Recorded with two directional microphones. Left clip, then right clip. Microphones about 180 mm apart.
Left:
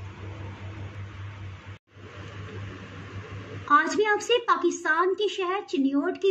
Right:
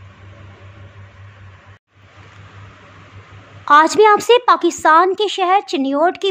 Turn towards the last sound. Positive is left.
turn(degrees=-45)  # may be behind; listen again after turning